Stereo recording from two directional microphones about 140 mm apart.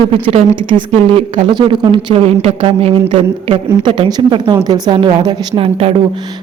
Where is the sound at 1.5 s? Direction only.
35° right (ahead or behind).